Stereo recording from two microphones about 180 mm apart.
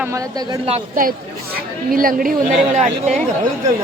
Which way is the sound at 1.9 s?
50° right (ahead or behind).